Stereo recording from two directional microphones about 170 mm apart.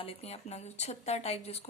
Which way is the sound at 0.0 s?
35° left (ahead or behind).